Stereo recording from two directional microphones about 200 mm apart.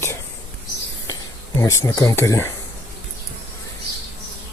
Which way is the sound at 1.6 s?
15° left (ahead or behind).